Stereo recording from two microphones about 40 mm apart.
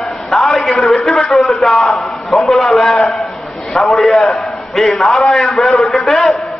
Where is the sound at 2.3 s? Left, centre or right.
Centre.